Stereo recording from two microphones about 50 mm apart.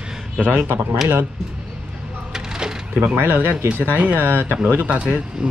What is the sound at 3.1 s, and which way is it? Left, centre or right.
Speech, right.